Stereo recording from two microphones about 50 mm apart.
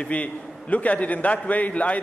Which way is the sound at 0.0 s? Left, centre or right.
Left.